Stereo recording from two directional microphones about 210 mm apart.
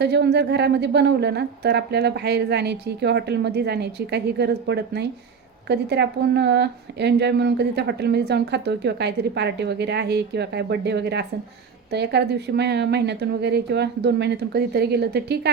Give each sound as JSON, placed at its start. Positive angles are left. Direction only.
{"t": 0.0, "sound": "speech", "side_deg": -55}